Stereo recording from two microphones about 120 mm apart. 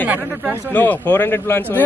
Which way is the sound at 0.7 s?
15° left (ahead or behind).